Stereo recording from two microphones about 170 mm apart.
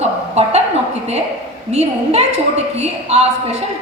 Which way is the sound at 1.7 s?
40° right (ahead or behind).